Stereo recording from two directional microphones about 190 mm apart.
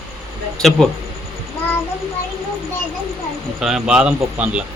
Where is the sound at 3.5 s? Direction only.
5° right (ahead or behind).